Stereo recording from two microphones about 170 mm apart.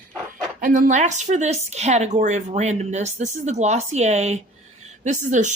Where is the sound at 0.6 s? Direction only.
50° right (ahead or behind).